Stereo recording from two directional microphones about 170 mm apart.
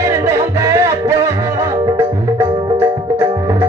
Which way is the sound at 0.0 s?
15° right (ahead or behind).